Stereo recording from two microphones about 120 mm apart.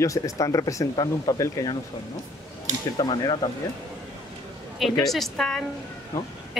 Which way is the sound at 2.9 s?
40° left (ahead or behind).